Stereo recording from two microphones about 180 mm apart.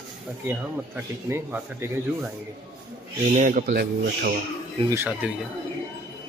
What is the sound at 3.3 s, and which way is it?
Speech, 45° right (ahead or behind).